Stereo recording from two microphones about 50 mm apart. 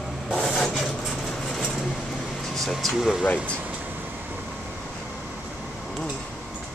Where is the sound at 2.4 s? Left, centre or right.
Centre.